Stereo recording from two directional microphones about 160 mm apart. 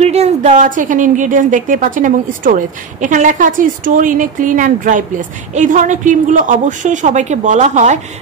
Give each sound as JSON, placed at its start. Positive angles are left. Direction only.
{"t": 0.0, "sound": "a woman's voice", "side_deg": -40}